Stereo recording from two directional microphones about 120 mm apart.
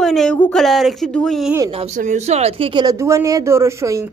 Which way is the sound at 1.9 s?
90° right.